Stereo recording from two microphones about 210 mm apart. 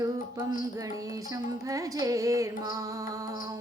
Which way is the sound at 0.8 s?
15° right (ahead or behind).